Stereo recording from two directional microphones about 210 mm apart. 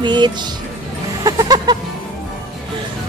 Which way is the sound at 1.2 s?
20° right (ahead or behind).